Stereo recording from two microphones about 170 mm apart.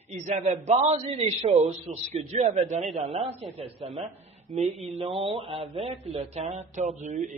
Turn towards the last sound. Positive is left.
turn(degrees=-45)  # may be behind; listen again after turning